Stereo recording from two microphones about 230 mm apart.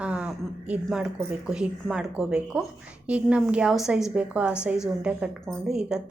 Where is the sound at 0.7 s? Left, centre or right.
Centre.